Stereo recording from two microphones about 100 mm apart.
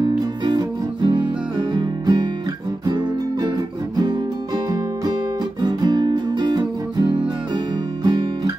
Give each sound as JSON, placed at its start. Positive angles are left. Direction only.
{"t": 0.0, "sound": "music", "side_deg": -50}
{"t": 5.6, "sound": "music", "side_deg": -45}